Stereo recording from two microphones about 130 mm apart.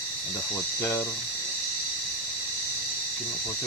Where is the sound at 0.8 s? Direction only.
20° left (ahead or behind).